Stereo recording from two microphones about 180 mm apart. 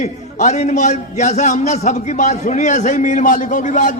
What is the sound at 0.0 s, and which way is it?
A man's voice, 40° left (ahead or behind).